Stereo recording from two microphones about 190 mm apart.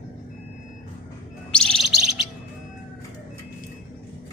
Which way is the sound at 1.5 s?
5° left (ahead or behind).